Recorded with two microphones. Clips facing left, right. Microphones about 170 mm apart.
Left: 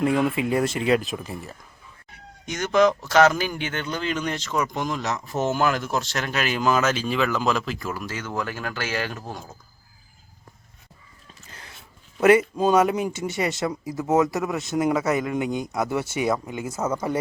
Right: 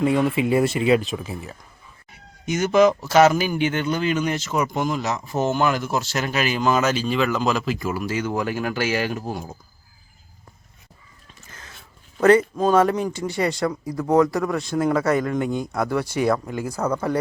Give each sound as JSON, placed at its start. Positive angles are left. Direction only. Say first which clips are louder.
{"t": 0.0, "sound": "speech", "louder": "right 2 dB", "side_deg": 0}
{"t": 11.4, "sound": "a sound", "louder": "right 1 dB", "side_deg": 15}
{"t": 12.2, "sound": "speech", "louder": "right 1 dB", "side_deg": 10}
{"t": 13.1, "sound": "speech", "louder": "right 2 dB", "side_deg": 20}
{"t": 13.7, "sound": "speech", "louder": "right 2 dB", "side_deg": 5}